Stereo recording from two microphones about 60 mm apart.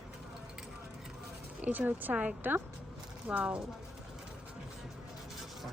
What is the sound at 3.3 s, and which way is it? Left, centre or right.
Speech, centre.